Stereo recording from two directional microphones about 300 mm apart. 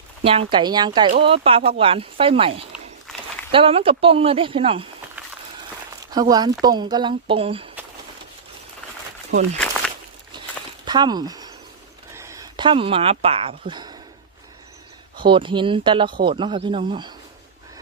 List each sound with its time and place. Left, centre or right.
0.3 s speech: centre
6.1 s speech: centre
10.3 s a sound: centre
10.8 s speech: centre
15.1 s speech: centre
16.0 s speech: right
16.3 s speech: centre